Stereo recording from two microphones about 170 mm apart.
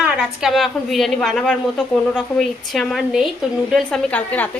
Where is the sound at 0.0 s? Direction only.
5° right (ahead or behind).